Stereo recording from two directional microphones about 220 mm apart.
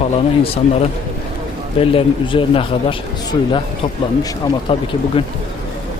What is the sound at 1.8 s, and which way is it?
Speech, 25° left (ahead or behind).